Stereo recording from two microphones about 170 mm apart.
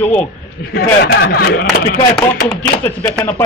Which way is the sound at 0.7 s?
65° left (ahead or behind).